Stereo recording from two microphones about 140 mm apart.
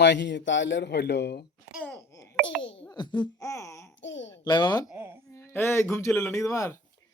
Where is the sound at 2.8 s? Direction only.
35° left (ahead or behind).